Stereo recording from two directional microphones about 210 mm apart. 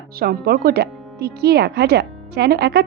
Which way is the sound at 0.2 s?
45° right (ahead or behind).